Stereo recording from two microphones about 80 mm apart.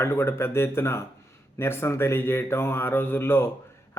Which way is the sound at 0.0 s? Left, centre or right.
Left.